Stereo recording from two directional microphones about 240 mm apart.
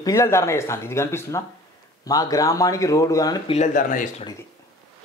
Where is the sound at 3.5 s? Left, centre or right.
Left.